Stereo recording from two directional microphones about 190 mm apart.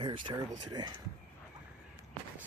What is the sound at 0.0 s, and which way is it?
Speech, 25° right (ahead or behind).